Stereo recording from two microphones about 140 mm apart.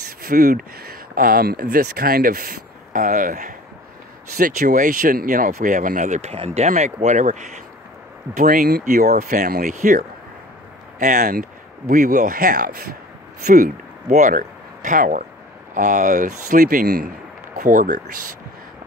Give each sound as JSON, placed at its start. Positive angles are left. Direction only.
{"t": 0.2, "sound": "speech", "side_deg": -80}
{"t": 6.3, "sound": "speech", "side_deg": -45}
{"t": 8.4, "sound": "speech", "side_deg": -85}
{"t": 11.0, "sound": "speech", "side_deg": -80}
{"t": 11.9, "sound": "speech", "side_deg": -65}
{"t": 14.0, "sound": "speech", "side_deg": -60}